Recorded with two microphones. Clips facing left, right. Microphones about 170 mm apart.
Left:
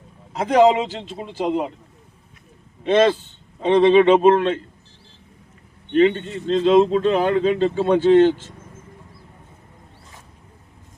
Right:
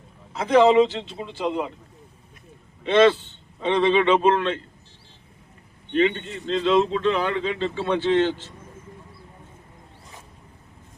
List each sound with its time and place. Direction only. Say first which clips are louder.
0.3 s speech: even; 40° left (ahead or behind)
2.8 s a man's voice: left 1 dB; 45° left (ahead or behind)
5.9 s speech: left 5 dB; 45° left (ahead or behind)